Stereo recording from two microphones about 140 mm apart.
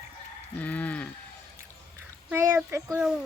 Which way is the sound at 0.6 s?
10° left (ahead or behind).